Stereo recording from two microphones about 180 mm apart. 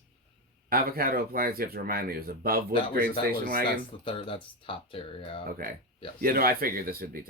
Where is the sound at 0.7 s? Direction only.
55° right (ahead or behind).